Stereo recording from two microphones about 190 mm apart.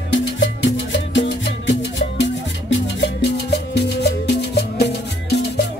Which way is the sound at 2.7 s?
65° left (ahead or behind).